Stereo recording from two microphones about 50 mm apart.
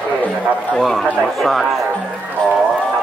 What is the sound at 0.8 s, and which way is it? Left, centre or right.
Speech, centre.